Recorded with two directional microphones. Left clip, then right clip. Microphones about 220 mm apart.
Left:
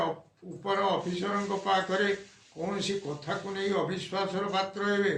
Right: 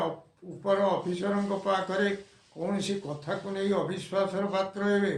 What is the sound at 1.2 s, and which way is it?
Speech, 50° right (ahead or behind).